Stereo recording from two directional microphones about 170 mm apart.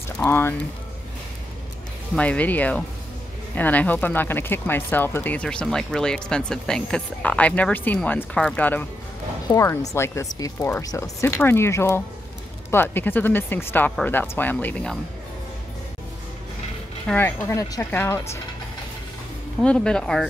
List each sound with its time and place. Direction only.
0.2 s speech: 15° left (ahead or behind)
2.1 s speech: 10° left (ahead or behind)
17.1 s speech: 15° left (ahead or behind)
19.6 s speech: 5° left (ahead or behind)